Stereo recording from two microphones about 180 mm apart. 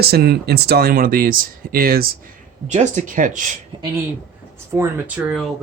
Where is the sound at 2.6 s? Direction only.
40° right (ahead or behind).